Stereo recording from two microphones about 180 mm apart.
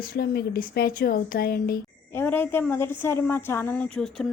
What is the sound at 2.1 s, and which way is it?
A woman's voice, 10° left (ahead or behind).